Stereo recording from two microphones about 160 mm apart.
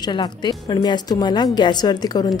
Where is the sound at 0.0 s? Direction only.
25° left (ahead or behind).